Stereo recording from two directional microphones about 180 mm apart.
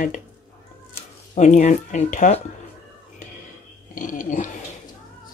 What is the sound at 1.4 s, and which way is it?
Speech, 40° left (ahead or behind).